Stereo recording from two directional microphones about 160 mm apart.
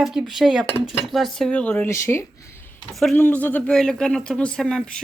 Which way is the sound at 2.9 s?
Centre (ahead or behind).